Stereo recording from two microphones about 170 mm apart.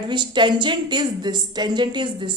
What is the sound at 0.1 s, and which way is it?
Speech, 25° right (ahead or behind).